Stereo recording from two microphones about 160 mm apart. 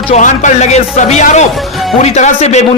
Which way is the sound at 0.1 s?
50° left (ahead or behind).